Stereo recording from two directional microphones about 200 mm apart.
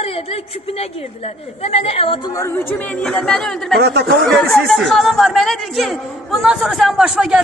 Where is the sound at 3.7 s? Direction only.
55° right (ahead or behind).